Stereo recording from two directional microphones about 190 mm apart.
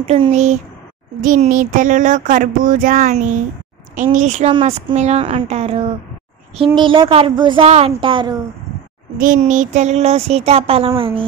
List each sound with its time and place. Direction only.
0.0 s speech: 35° right (ahead or behind)
1.2 s a sound: 45° right (ahead or behind)
3.9 s a woman's voice: 40° right (ahead or behind); by 8.4 s 25° right (ahead or behind)
9.2 s a woman's voice: 40° right (ahead or behind)